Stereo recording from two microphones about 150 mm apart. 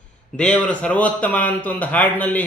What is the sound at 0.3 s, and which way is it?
A man's voice, 10° left (ahead or behind).